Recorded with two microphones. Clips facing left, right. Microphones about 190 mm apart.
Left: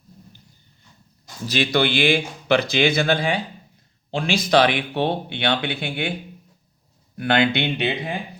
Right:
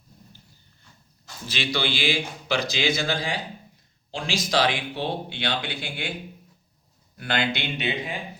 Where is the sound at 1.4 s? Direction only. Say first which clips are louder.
Left 7 dB; 45° left (ahead or behind).